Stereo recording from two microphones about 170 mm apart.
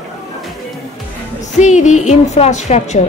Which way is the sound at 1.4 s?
45° left (ahead or behind).